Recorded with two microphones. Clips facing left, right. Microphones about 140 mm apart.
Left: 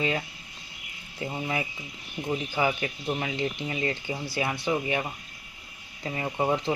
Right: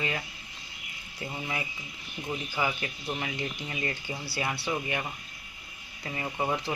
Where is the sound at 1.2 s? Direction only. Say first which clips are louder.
Left 5 dB; 20° left (ahead or behind).